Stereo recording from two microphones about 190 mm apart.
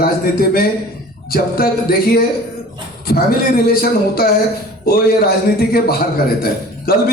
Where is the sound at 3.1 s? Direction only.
55° left (ahead or behind).